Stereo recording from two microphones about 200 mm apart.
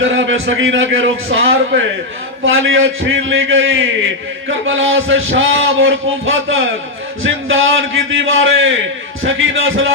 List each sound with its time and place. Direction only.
0.0 s a man's voice: 75° right (ahead or behind)